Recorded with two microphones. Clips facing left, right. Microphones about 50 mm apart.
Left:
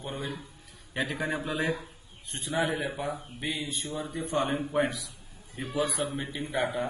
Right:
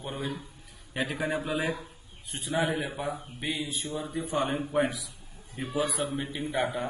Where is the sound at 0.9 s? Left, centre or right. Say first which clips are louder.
Right 1 dB; centre.